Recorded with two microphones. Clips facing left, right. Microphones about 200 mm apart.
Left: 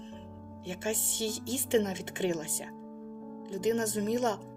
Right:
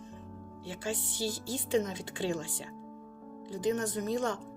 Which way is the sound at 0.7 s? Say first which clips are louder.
Left 3 dB; 20° left (ahead or behind).